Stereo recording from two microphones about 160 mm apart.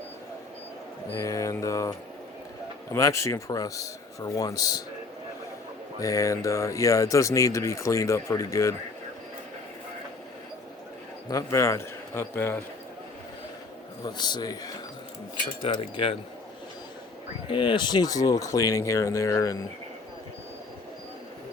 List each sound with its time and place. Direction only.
1.1 s speech: 20° left (ahead or behind)
6.0 s speech: 20° left (ahead or behind)
11.3 s speech: 20° left (ahead or behind)
14.0 s speech: 25° left (ahead or behind)
15.6 s wind chime: 35° left (ahead or behind)
17.5 s speech: 30° left (ahead or behind)